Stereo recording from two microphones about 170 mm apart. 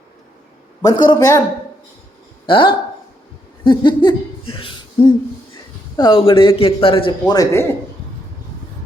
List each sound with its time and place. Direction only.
0.8 s a man's voice: 25° left (ahead or behind)
2.5 s a man's voice: 30° left (ahead or behind)